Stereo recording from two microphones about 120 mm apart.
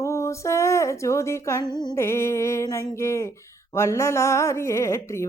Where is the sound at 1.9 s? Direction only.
20° left (ahead or behind).